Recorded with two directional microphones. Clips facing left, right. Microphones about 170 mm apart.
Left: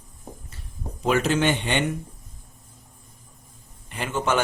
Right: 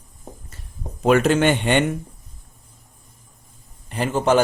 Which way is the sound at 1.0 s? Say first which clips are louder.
Right 5 dB; 55° right (ahead or behind).